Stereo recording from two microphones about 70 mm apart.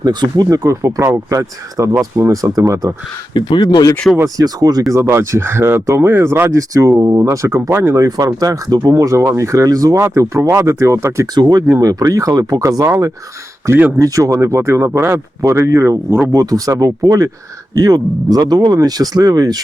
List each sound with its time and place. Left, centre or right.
0.0 s speech: right
0.5 s speech: right
3.3 s speech: left
4.4 s speech: right
4.9 s speech: right
6.5 s speech: right
7.9 s speech: right
9.0 s speech: right
11.3 s speech: right
11.6 s speech: right
16.0 s speech: right
16.3 s speech: right
18.8 s speech: right